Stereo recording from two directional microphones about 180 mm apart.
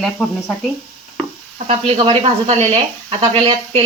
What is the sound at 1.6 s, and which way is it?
Speech, 35° right (ahead or behind).